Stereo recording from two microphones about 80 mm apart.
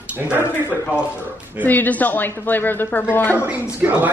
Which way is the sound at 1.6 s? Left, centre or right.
Left.